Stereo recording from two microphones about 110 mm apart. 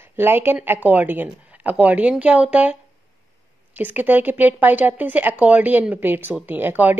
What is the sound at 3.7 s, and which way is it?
Speech, 15° right (ahead or behind).